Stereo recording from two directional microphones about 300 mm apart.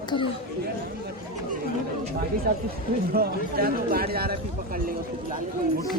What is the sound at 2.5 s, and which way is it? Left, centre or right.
A man's voice, right.